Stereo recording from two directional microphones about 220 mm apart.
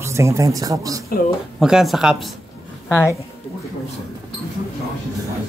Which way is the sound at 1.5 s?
Centre (ahead or behind).